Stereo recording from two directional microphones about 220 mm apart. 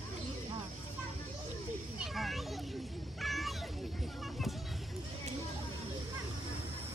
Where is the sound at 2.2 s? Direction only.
Centre (ahead or behind).